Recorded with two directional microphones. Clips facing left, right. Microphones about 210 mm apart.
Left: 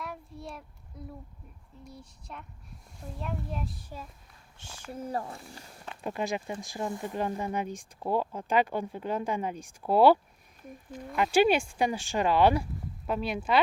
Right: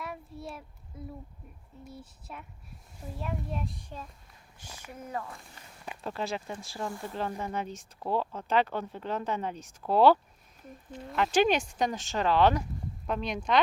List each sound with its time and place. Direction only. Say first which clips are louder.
0.0 s child singing: right 1 dB; centre (ahead or behind)
1.8 s a child's voice: right 2 dB; 5° right (ahead or behind)
4.5 s speech: left 5 dB; 30° left (ahead or behind)
6.0 s a child's voice: left 2 dB; 15° left (ahead or behind)